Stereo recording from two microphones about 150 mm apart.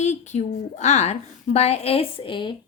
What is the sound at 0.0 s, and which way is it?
A woman's voice, 50° left (ahead or behind).